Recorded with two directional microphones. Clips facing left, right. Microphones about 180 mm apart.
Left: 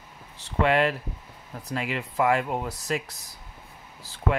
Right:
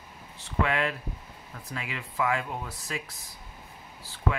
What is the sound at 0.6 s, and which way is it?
Speech, 35° left (ahead or behind).